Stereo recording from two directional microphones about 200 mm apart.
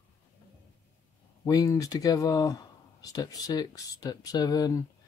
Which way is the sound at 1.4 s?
15° left (ahead or behind).